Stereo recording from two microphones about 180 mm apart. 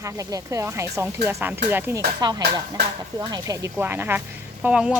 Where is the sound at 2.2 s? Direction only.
25° right (ahead or behind); by 5.0 s 5° right (ahead or behind).